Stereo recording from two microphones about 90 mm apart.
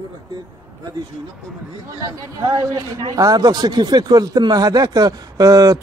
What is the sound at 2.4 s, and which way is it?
Speech, 50° right (ahead or behind).